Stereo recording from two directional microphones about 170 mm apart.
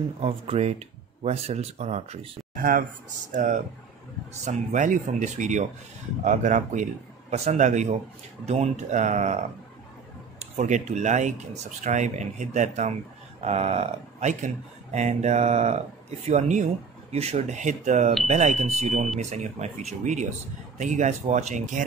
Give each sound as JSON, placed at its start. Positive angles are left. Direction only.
{"t": 0.2, "sound": "speech", "side_deg": -35}
{"t": 2.5, "sound": "speech", "side_deg": -55}
{"t": 10.4, "sound": "speech", "side_deg": -40}